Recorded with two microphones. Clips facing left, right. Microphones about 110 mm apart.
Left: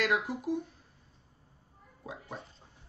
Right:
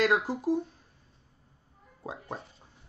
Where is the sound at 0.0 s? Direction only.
35° right (ahead or behind).